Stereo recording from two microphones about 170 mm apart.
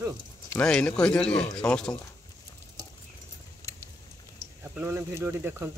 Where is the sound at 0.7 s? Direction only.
5° left (ahead or behind).